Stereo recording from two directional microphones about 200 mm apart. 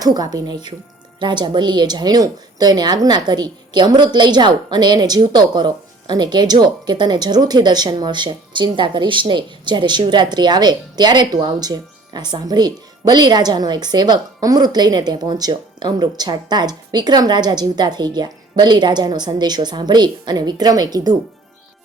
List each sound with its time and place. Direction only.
0.0 s speech: 20° right (ahead or behind)